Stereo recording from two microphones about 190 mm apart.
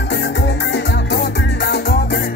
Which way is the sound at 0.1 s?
65° left (ahead or behind).